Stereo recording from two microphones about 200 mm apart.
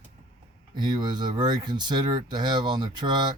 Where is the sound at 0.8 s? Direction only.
20° right (ahead or behind).